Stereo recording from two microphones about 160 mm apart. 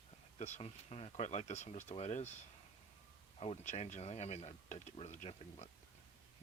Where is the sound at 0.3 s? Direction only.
45° left (ahead or behind).